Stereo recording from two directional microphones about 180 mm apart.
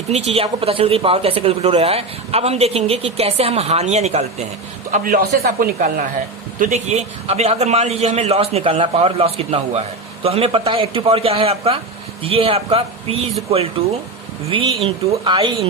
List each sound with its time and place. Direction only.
0.1 s speech: 35° right (ahead or behind)
4.9 s a man's voice: 55° right (ahead or behind)
6.6 s speech: 40° right (ahead or behind)
14.5 s speech: 30° right (ahead or behind)